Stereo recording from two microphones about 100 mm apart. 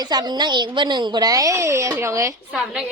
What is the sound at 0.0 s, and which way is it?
A woman's voice, 45° right (ahead or behind).